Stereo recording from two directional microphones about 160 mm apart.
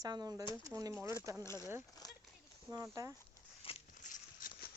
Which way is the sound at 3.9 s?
50° left (ahead or behind).